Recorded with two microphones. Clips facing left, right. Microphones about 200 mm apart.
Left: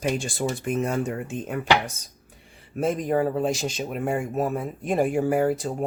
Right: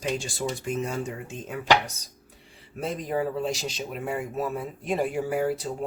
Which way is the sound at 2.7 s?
50° left (ahead or behind).